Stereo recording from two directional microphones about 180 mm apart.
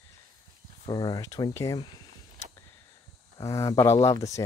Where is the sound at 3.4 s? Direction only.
15° left (ahead or behind).